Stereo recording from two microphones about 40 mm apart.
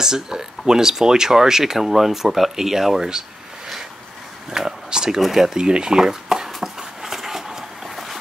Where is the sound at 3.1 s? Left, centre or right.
Centre.